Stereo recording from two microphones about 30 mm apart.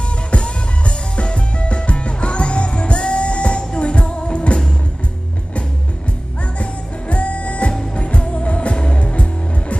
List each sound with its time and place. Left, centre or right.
0.3 s music: left
6.6 s music: left